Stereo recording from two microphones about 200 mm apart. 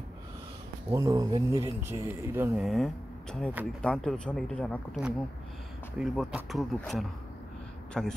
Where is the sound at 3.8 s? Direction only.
5° left (ahead or behind).